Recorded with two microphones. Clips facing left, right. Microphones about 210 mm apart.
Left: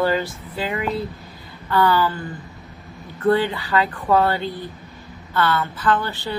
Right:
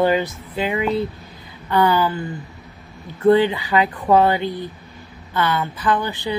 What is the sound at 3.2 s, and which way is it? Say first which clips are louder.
A woman's voice: right 4 dB; 20° right (ahead or behind).